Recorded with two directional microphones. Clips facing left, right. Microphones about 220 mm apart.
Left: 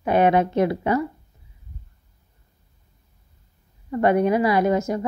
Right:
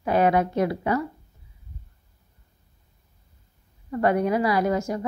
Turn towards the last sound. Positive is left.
turn(degrees=20)  # may be behind; listen again after turning